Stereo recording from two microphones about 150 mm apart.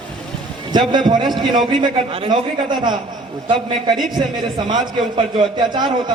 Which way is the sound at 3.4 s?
30° right (ahead or behind).